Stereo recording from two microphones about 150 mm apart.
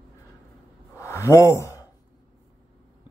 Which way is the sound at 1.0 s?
20° left (ahead or behind).